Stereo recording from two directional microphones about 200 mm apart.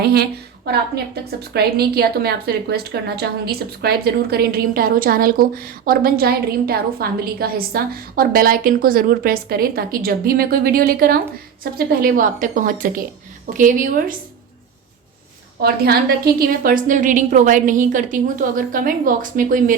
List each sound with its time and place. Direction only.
0.0 s a woman's voice: 50° right (ahead or behind)
15.6 s a woman's voice: 50° right (ahead or behind)